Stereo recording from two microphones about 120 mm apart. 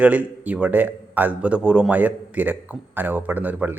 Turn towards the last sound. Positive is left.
turn(degrees=-15)  # may be behind; listen again after turning